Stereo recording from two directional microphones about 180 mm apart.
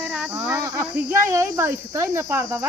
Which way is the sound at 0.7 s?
15° right (ahead or behind).